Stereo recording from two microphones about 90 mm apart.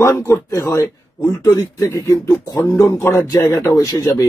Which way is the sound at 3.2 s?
45° left (ahead or behind).